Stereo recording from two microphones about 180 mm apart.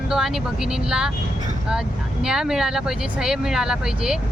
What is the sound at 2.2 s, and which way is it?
Speech, 5° right (ahead or behind).